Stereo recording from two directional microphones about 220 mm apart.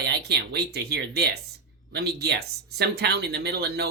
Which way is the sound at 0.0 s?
45° right (ahead or behind).